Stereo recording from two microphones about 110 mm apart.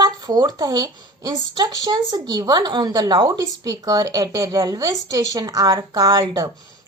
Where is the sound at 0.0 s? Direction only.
40° right (ahead or behind).